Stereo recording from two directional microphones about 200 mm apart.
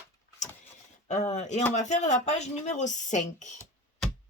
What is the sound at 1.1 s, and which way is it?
A woman's voice, 35° left (ahead or behind).